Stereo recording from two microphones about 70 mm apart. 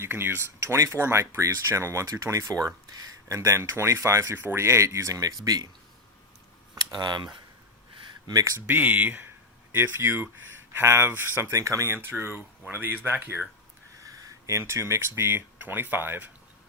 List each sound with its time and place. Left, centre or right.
0.0 s speech: right
2.5 s speech: right
3.2 s speech: right
4.4 s speech: right
4.6 s speech: right
6.9 s speech: right
8.3 s speech: right
8.6 s speech: right
9.7 s speech: right
14.0 s a sound: right
14.5 s speech: right